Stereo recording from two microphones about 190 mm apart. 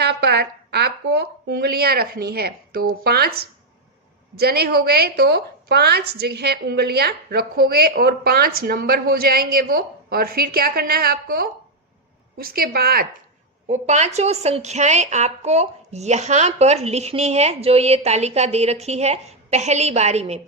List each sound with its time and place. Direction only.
0.0 s a woman's voice: 60° right (ahead or behind)
13.7 s a woman's voice: 40° right (ahead or behind)